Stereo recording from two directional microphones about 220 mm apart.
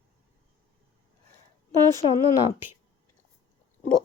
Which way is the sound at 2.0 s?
25° left (ahead or behind).